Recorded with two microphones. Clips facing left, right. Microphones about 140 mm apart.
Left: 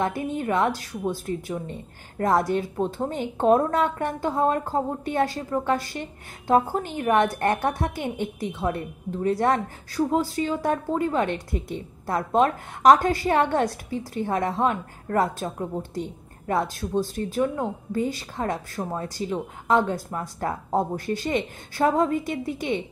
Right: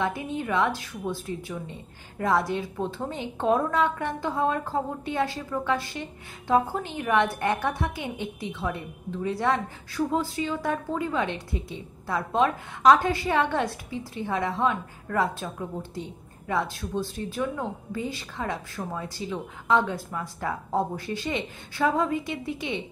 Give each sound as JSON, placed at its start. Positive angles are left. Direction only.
{"t": 0.0, "sound": "a woman's voice", "side_deg": 45}